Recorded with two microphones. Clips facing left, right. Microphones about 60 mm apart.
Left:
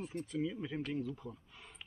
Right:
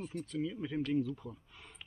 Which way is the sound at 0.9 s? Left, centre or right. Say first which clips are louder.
Right 5 dB; centre.